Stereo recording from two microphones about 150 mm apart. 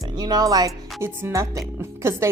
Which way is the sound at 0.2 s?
25° right (ahead or behind).